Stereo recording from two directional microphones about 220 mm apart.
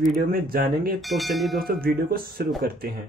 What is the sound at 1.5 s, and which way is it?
Speech, 40° right (ahead or behind).